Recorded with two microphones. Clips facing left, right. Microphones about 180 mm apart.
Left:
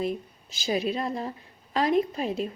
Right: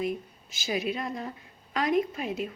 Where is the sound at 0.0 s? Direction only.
30° left (ahead or behind).